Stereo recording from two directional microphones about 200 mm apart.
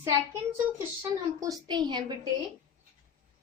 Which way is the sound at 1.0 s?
15° right (ahead or behind).